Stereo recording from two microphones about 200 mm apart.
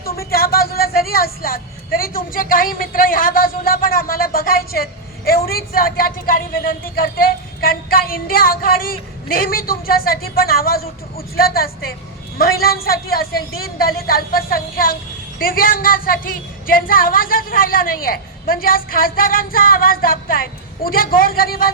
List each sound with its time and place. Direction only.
0.3 s speech: 50° left (ahead or behind)
12.4 s speech: 50° left (ahead or behind)